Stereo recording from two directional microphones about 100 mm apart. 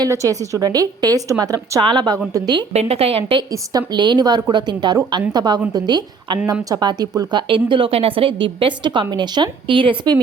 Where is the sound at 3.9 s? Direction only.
45° right (ahead or behind).